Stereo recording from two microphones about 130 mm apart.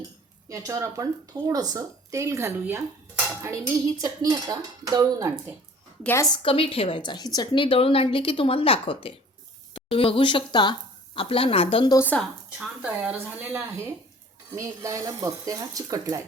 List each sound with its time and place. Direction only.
0.4 s a woman's voice: 25° right (ahead or behind)
6.3 s a woman's voice: 45° left (ahead or behind)
11.9 s speech: 15° left (ahead or behind)
12.5 s a woman's voice: 10° right (ahead or behind); by 16.2 s 25° right (ahead or behind)